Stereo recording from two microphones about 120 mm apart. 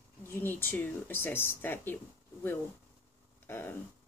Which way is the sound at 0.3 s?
20° left (ahead or behind).